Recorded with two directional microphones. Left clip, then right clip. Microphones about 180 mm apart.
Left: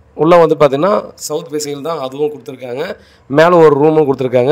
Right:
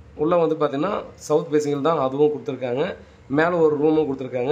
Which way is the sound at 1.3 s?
Centre (ahead or behind).